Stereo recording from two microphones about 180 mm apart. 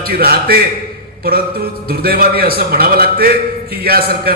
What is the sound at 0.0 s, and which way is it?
Speech, 55° right (ahead or behind).